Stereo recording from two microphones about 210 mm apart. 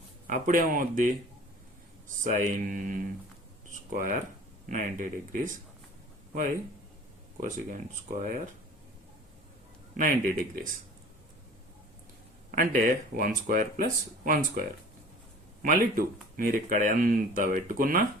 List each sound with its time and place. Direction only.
0.3 s speech: 40° right (ahead or behind)
2.2 s speech: 40° right (ahead or behind)
7.3 s speech: 40° right (ahead or behind)
10.0 s speech: 40° right (ahead or behind)
12.5 s speech: 40° right (ahead or behind)
15.6 s speech: 40° right (ahead or behind)